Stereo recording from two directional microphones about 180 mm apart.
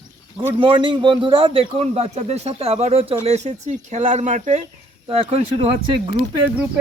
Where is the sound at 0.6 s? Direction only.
25° right (ahead or behind); by 4.6 s 45° right (ahead or behind).